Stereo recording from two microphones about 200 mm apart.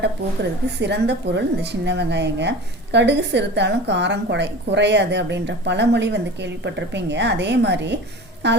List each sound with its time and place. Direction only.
0.8 s a woman's voice: 60° right (ahead or behind)